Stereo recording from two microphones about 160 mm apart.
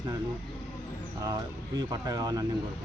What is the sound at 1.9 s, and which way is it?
Speech, 25° right (ahead or behind).